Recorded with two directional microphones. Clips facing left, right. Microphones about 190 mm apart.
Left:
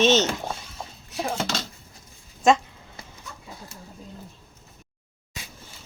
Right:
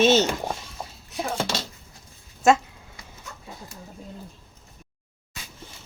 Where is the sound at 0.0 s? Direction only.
10° right (ahead or behind).